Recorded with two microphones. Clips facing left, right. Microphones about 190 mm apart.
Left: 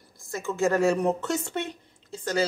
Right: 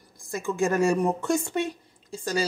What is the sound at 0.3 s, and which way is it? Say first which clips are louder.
Speech: even; 15° right (ahead or behind).